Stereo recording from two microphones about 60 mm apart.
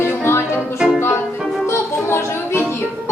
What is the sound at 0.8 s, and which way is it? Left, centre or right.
Music, centre.